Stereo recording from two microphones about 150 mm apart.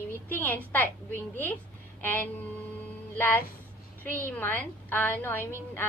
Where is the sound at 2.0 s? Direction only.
15° left (ahead or behind).